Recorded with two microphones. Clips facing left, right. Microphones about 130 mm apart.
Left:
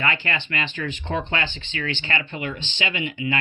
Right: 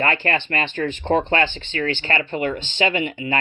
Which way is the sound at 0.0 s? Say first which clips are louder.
Right 5 dB; 45° right (ahead or behind).